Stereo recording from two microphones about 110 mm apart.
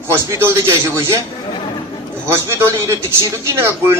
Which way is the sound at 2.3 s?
25° right (ahead or behind).